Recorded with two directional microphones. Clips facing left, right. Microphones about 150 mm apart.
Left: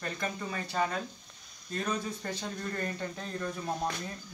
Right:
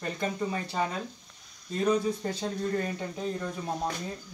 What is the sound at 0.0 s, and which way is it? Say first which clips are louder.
Speech: right 5 dB; 20° right (ahead or behind).